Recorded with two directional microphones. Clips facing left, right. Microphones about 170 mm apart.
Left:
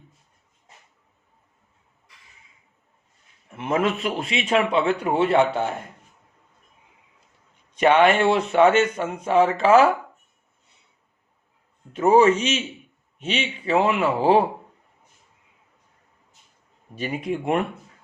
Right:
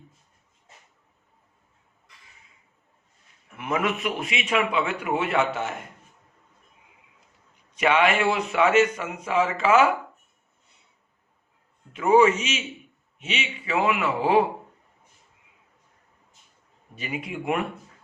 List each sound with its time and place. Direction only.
3.5 s a man's voice: 30° left (ahead or behind)
7.8 s a man's voice: 35° left (ahead or behind)
11.9 s a man's voice: 35° left (ahead or behind)
16.9 s a man's voice: 35° left (ahead or behind)